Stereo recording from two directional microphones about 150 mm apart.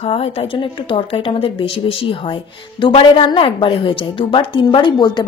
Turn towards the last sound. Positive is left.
turn(degrees=30)  # may be behind; listen again after turning